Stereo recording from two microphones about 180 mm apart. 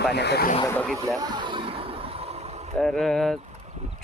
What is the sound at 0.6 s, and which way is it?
Speech, 10° left (ahead or behind).